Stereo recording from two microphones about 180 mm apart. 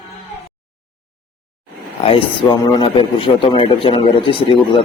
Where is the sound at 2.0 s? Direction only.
35° left (ahead or behind).